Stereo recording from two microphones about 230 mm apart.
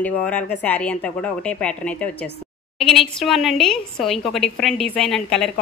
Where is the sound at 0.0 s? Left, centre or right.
Centre.